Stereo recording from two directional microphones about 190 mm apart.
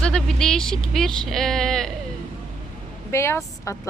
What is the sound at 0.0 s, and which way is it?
Speech, 5° left (ahead or behind).